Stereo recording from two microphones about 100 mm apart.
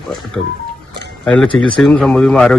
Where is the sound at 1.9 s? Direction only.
10° left (ahead or behind).